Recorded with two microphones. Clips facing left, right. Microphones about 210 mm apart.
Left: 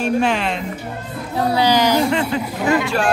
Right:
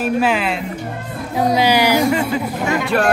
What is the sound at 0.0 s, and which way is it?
Speech, 5° right (ahead or behind).